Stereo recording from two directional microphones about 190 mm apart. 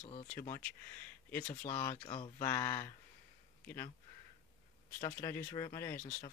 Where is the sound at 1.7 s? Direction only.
15° left (ahead or behind).